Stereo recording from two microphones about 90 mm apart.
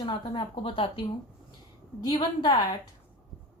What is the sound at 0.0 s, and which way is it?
Speech, 70° left (ahead or behind).